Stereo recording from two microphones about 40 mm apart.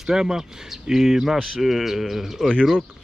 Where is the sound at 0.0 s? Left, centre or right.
Centre.